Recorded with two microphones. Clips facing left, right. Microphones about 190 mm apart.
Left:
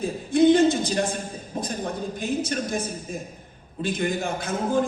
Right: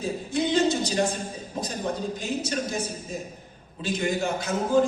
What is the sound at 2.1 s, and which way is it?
A man's voice, 55° left (ahead or behind).